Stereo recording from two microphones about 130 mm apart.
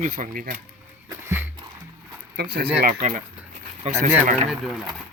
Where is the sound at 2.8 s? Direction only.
75° right (ahead or behind).